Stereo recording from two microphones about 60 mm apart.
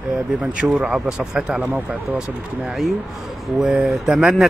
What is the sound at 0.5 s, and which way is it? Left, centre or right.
Speech, centre.